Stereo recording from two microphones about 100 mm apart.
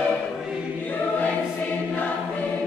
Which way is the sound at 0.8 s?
15° left (ahead or behind).